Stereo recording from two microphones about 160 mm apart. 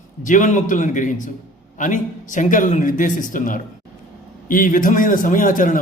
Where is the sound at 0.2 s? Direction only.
50° left (ahead or behind).